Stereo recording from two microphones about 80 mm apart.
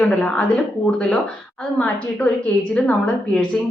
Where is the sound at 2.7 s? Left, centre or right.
Centre.